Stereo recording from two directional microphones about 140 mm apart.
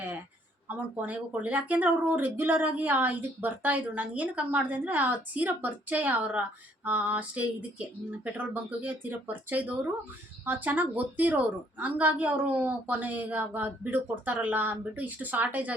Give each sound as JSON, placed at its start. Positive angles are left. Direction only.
{"t": 0.7, "sound": "speech", "side_deg": -10}